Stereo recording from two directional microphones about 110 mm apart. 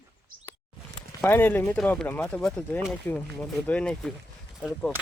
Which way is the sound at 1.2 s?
20° left (ahead or behind).